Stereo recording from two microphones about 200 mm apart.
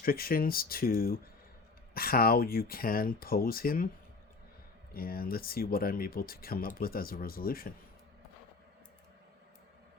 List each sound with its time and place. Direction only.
0.0 s speech: 45° left (ahead or behind)
4.9 s speech: 50° left (ahead or behind)